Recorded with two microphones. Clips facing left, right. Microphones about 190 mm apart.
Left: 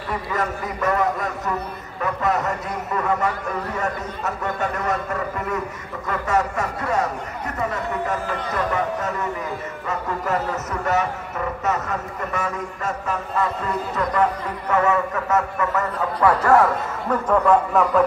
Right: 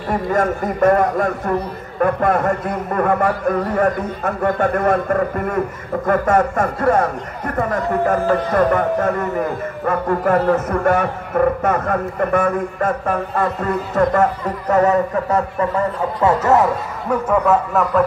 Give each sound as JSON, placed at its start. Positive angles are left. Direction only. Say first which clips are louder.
{"t": 0.1, "sound": "speech", "louder": "right 8 dB", "side_deg": -50}
{"t": 17.3, "sound": "speech", "louder": "even", "side_deg": -5}